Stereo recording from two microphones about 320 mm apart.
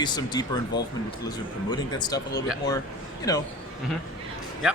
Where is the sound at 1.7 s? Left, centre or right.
Centre.